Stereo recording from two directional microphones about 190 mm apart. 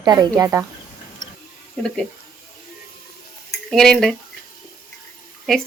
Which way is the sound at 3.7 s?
5° left (ahead or behind).